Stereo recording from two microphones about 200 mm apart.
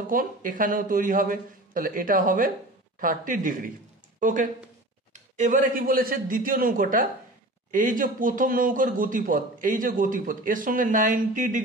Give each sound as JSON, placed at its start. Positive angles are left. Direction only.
{"t": 0.0, "sound": "speech", "side_deg": -45}